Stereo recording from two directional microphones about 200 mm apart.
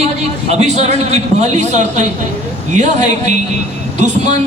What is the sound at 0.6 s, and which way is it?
A man's voice, 35° right (ahead or behind).